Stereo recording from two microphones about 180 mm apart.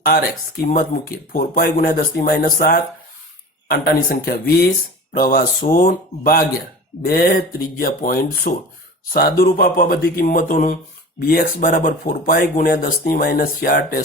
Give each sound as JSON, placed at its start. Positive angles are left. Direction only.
{"t": 0.0, "sound": "speech", "side_deg": 55}